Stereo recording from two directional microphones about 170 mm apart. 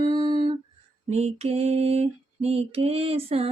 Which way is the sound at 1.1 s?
40° right (ahead or behind).